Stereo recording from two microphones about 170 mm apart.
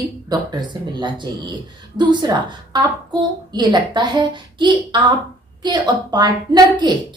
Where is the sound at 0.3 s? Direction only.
25° right (ahead or behind).